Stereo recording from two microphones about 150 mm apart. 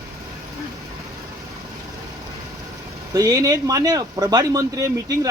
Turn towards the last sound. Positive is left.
turn(degrees=-25)  # may be behind; listen again after turning